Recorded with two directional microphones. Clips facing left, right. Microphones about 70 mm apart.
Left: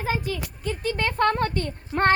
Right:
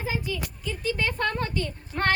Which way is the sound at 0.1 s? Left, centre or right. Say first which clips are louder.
Left 4 dB; left.